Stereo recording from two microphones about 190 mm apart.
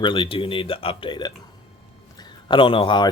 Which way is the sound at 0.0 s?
25° left (ahead or behind).